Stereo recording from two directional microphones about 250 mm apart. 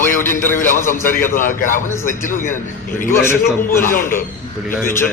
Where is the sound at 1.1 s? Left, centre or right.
Left.